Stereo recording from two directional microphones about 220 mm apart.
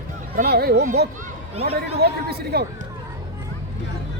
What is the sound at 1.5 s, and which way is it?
Speech, 30° right (ahead or behind).